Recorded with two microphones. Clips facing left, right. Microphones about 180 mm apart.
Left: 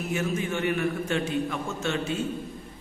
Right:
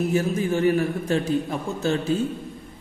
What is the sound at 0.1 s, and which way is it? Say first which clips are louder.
A man's voice: right 6 dB; 35° right (ahead or behind).